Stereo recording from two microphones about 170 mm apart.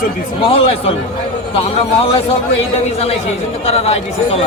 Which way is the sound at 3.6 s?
40° left (ahead or behind).